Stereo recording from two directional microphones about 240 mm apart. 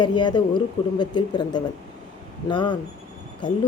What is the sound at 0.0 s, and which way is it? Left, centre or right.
A woman's voice, centre.